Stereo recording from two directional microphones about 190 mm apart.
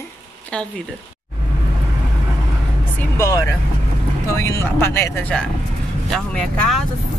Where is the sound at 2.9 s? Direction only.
10° left (ahead or behind).